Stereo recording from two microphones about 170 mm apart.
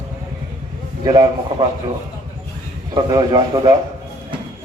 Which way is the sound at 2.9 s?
20° right (ahead or behind).